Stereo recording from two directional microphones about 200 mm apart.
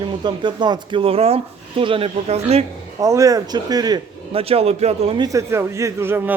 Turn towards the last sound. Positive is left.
turn(degrees=-10)  # may be behind; listen again after turning